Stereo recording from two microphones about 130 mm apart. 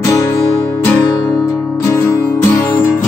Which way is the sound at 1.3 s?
25° left (ahead or behind).